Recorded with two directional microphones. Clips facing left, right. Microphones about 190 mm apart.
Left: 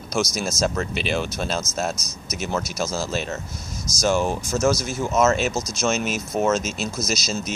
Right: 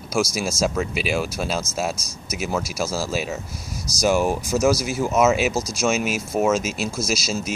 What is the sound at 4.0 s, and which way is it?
Speech, 10° right (ahead or behind).